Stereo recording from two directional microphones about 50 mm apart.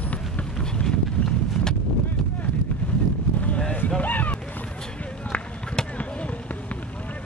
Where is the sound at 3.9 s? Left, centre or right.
Left.